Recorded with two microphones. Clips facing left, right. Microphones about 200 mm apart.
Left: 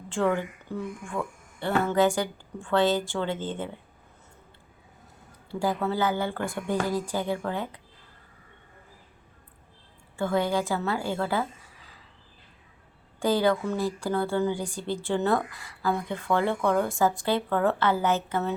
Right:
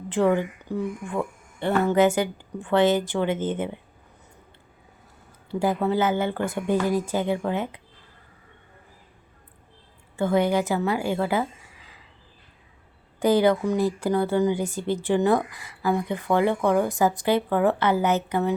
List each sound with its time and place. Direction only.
0.1 s speech: 15° right (ahead or behind)
5.5 s speech: 20° right (ahead or behind)
10.2 s a woman's voice: 20° right (ahead or behind)
13.1 s a woman's voice: 20° right (ahead or behind)